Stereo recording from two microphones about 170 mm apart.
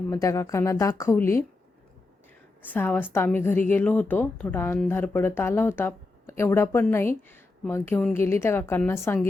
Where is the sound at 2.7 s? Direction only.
10° left (ahead or behind).